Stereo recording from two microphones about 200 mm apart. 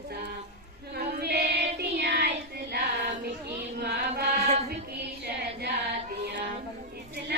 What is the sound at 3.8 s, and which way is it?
Carnatic music, 55° right (ahead or behind).